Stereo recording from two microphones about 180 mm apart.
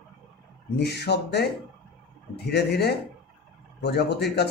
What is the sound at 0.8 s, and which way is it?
Speech, 70° left (ahead or behind).